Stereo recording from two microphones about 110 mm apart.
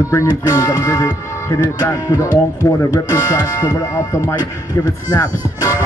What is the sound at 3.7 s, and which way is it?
Speech, 30° left (ahead or behind).